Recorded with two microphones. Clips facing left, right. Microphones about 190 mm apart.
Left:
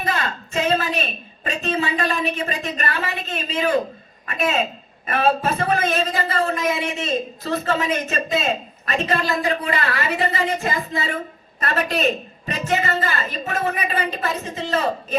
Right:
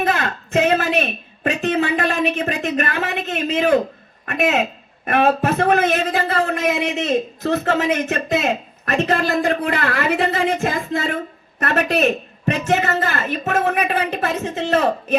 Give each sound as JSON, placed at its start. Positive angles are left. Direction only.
{"t": 0.0, "sound": "a sound", "side_deg": -60}
{"t": 4.3, "sound": "speech", "side_deg": -65}
{"t": 11.6, "sound": "a woman's voice", "side_deg": -70}